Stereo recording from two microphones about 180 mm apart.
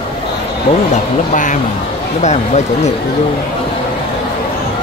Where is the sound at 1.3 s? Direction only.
45° left (ahead or behind).